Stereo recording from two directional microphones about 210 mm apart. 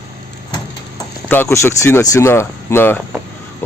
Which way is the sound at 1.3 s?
10° left (ahead or behind).